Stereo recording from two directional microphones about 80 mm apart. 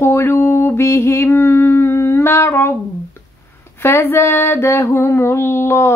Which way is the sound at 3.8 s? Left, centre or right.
Left.